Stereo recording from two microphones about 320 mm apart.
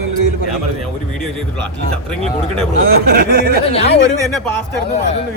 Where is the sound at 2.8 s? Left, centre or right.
Right.